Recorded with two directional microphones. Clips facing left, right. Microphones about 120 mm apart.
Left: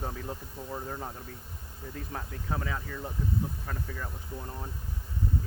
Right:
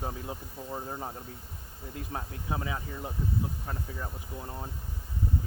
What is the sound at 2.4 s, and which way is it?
Speech, 15° right (ahead or behind).